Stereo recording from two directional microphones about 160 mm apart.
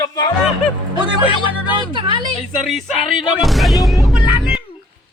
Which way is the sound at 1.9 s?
30° right (ahead or behind).